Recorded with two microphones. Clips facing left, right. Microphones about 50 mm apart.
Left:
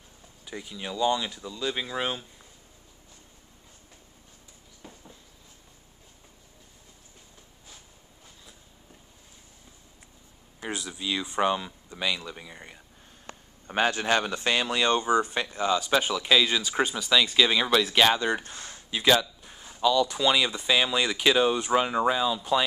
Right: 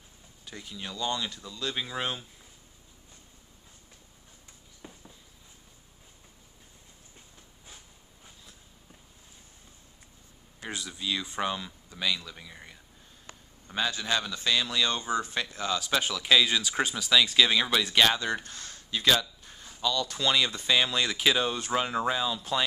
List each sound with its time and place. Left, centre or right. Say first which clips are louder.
0.5 s a man's voice: left 4 dB; centre
4.8 s a sound: left 1 dB; centre
10.7 s a man's voice: left 2 dB; centre
13.3 s a man's voice: left 7 dB; left; by 18.4 s centre
18.5 s speech: left 1 dB; left; by 22.6 s centre